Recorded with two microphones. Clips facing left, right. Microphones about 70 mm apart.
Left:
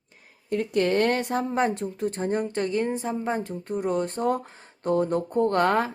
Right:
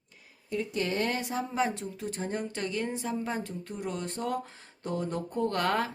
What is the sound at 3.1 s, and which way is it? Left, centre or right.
Speech, left.